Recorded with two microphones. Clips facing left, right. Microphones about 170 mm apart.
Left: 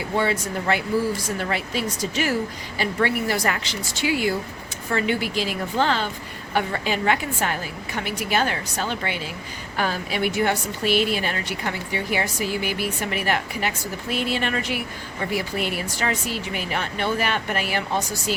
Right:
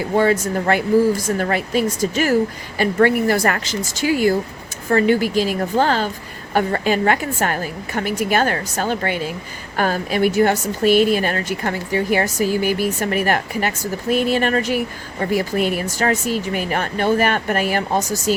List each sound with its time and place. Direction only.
0.2 s a woman's voice: 45° right (ahead or behind)